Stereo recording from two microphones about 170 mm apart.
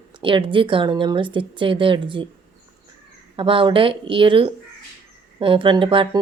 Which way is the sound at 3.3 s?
30° right (ahead or behind).